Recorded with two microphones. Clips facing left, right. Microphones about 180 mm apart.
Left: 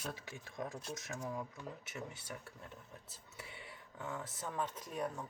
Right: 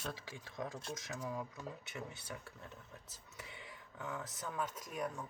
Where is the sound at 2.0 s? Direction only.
25° left (ahead or behind).